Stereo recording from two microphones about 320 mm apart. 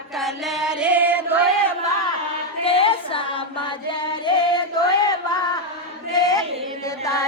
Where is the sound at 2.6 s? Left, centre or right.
Centre.